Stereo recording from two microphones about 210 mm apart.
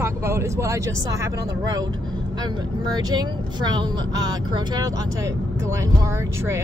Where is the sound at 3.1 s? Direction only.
20° right (ahead or behind).